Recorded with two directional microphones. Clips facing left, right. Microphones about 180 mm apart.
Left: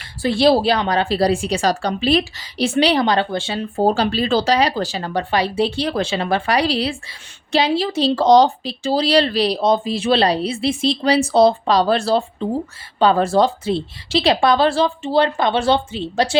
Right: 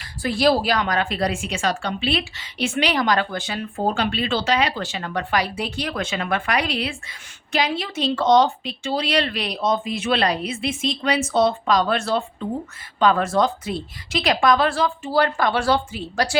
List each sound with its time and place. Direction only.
0.2 s a woman's voice: 30° left (ahead or behind)